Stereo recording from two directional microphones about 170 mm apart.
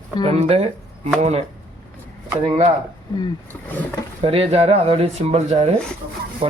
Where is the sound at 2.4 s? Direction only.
40° right (ahead or behind).